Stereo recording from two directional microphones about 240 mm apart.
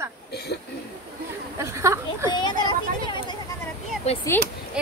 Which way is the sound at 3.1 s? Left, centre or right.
Centre.